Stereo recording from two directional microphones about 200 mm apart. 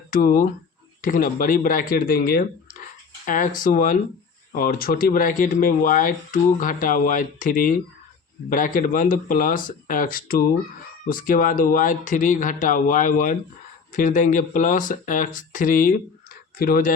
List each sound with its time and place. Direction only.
0.1 s speech: 45° left (ahead or behind)